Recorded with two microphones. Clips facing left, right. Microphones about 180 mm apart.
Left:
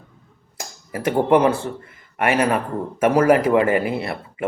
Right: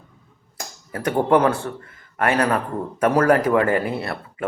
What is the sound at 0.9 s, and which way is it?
Speech, 5° left (ahead or behind).